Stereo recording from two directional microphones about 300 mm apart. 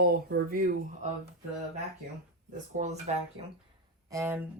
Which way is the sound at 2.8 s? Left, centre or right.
Right.